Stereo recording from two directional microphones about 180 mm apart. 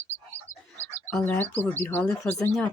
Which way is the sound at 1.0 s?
10° left (ahead or behind).